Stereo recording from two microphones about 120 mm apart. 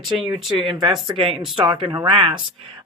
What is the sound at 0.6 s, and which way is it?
Speech, 40° right (ahead or behind).